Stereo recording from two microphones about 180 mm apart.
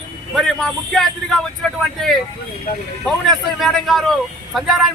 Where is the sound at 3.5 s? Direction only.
Centre (ahead or behind).